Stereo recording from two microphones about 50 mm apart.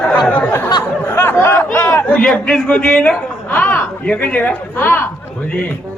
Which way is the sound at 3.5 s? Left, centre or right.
Left.